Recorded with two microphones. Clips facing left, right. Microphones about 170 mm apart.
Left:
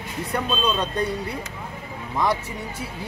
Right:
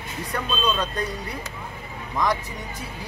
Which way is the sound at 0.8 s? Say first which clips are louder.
Left 3 dB; 30° left (ahead or behind).